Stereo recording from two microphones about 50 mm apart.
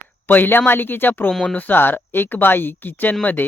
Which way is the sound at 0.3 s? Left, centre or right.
Left.